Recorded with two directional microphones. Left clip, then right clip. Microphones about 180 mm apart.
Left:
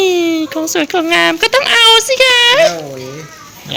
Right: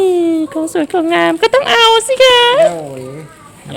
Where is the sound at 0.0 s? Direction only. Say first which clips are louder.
Even; 20° right (ahead or behind).